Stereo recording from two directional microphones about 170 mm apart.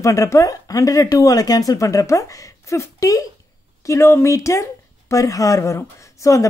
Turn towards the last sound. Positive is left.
turn(degrees=20)  # may be behind; listen again after turning